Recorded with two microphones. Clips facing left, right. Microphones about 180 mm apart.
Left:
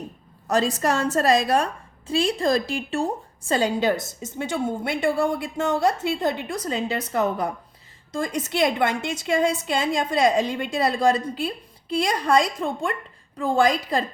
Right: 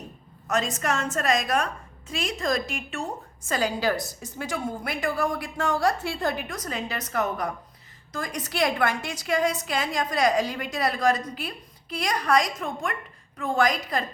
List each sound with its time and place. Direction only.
0.4 s a woman's voice: 35° left (ahead or behind)